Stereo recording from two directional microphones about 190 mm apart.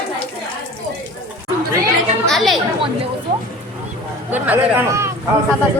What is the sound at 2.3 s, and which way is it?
Speech, centre (ahead or behind).